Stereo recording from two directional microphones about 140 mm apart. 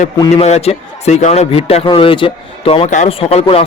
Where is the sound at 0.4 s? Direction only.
50° left (ahead or behind).